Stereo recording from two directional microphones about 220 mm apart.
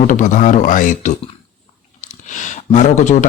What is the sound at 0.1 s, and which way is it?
Speech, 35° left (ahead or behind).